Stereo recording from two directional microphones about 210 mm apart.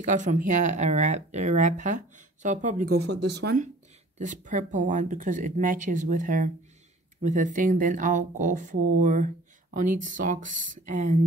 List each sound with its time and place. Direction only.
0.0 s speech: 35° right (ahead or behind); by 3.5 s 55° right (ahead or behind)
4.2 s speech: 35° right (ahead or behind)